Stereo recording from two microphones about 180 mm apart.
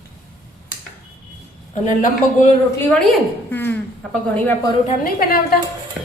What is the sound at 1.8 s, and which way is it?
Speech, 45° left (ahead or behind).